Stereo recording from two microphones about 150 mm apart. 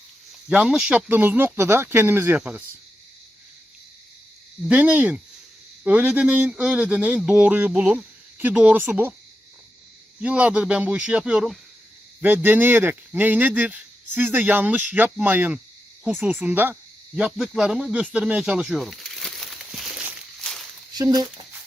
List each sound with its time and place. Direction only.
0.4 s speech: 5° right (ahead or behind)
4.7 s speech: 10° right (ahead or behind)
10.2 s speech: 10° right (ahead or behind)
20.4 s a sound: 5° left (ahead or behind)
20.9 s speech: 25° right (ahead or behind)